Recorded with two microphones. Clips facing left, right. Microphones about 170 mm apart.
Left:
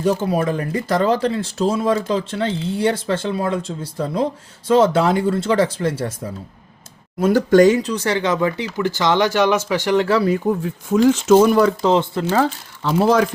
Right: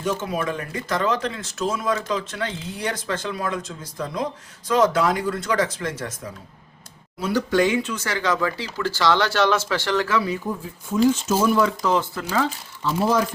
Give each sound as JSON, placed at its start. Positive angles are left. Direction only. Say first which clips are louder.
{"t": 0.0, "sound": "speech", "louder": "left 6 dB", "side_deg": 35}
{"t": 7.2, "sound": "speech", "louder": "left 8 dB", "side_deg": 50}
{"t": 10.2, "sound": "speech", "louder": "left 8 dB", "side_deg": 50}
{"t": 10.6, "sound": "speech", "louder": "left 4 dB", "side_deg": 80}
{"t": 11.8, "sound": "speech", "louder": "left 6 dB", "side_deg": 25}
{"t": 12.8, "sound": "speech", "louder": "left 5 dB", "side_deg": 70}